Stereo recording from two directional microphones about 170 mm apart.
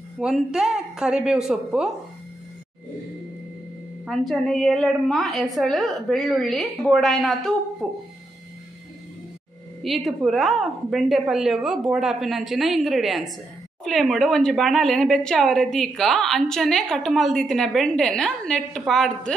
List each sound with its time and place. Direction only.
0.2 s a woman's voice: 5° right (ahead or behind)
4.0 s a woman's voice: centre (ahead or behind)
9.8 s a woman's voice: centre (ahead or behind)